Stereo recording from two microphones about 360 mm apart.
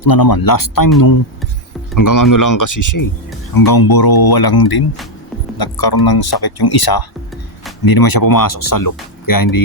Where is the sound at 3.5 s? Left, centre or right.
Left.